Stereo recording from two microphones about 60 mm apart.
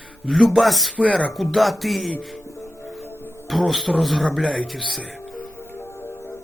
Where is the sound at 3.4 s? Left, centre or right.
Centre.